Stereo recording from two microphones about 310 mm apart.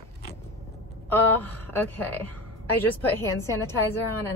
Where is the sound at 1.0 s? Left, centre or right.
Centre.